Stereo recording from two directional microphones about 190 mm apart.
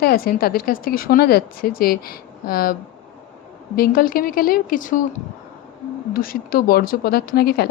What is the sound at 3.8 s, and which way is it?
A woman's voice, 50° left (ahead or behind).